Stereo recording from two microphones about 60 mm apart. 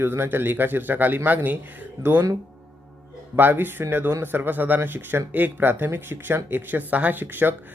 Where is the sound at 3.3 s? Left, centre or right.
Right.